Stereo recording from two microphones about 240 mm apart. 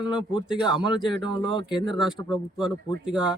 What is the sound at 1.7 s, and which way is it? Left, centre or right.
A man's voice, centre.